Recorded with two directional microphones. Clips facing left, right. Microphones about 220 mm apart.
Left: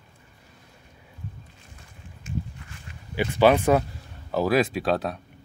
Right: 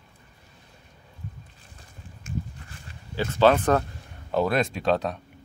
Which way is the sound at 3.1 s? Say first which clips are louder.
Left 1 dB; 15° left (ahead or behind).